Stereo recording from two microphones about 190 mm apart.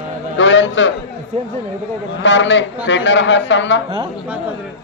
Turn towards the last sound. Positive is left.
turn(degrees=70)  # may be behind; listen again after turning